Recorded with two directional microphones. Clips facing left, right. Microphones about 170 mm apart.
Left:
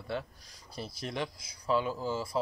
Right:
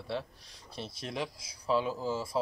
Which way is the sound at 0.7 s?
25° right (ahead or behind).